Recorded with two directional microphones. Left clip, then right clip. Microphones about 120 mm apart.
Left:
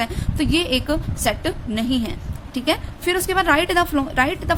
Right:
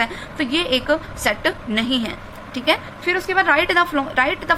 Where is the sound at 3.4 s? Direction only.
90° left; by 4.5 s 65° left (ahead or behind).